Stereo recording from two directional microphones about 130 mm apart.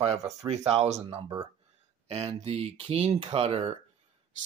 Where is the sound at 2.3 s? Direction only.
50° right (ahead or behind).